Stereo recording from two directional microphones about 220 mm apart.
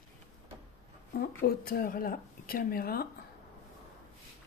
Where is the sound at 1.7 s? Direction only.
40° left (ahead or behind).